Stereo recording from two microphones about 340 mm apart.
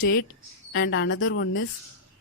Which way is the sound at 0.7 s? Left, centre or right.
Left.